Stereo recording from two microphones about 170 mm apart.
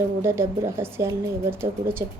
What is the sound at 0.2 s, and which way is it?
Speech, 15° right (ahead or behind).